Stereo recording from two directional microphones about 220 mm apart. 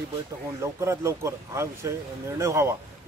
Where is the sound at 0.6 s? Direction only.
15° right (ahead or behind).